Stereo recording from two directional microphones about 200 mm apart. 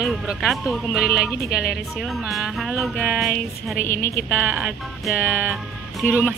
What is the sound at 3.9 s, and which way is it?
Speech, 45° left (ahead or behind).